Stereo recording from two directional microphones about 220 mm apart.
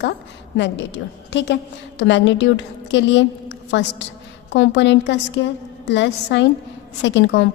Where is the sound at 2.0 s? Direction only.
55° left (ahead or behind).